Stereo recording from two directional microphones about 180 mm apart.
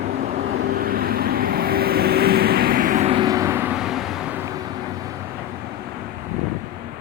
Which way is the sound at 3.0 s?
25° right (ahead or behind).